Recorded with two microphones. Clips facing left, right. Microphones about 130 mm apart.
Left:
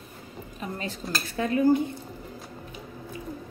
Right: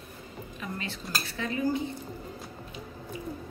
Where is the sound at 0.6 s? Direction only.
40° left (ahead or behind).